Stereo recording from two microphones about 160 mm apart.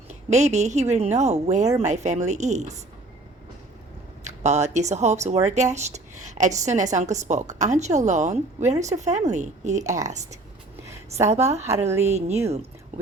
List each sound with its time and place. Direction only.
0.1 s a woman's voice: 45° right (ahead or behind)
4.2 s a woman's voice: 45° right (ahead or behind)
11.3 s a woman's voice: 45° right (ahead or behind)
11.7 s a woman's voice: 15° right (ahead or behind)
12.0 s a woman's voice: 45° right (ahead or behind)